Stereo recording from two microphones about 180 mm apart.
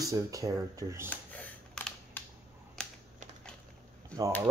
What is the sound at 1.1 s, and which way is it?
Camera, 10° left (ahead or behind).